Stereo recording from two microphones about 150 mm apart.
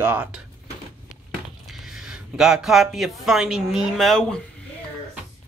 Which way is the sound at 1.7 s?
5° right (ahead or behind).